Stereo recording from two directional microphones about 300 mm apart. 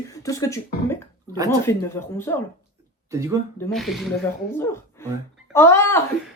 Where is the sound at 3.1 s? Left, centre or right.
Centre.